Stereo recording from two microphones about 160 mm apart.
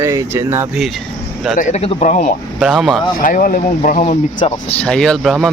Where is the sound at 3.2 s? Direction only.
60° left (ahead or behind).